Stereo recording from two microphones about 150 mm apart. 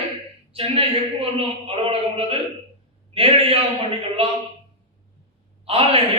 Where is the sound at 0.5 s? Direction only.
40° right (ahead or behind).